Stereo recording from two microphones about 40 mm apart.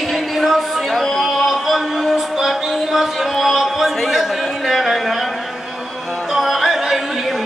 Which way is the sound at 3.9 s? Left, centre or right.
Centre.